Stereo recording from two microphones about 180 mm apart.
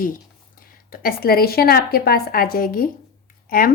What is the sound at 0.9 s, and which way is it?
A woman's voice, 55° left (ahead or behind).